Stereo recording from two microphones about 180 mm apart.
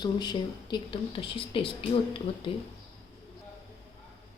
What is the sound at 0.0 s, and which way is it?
A woman's voice, 25° left (ahead or behind).